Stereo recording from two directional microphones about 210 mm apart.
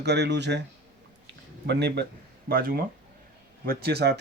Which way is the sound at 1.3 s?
55° right (ahead or behind).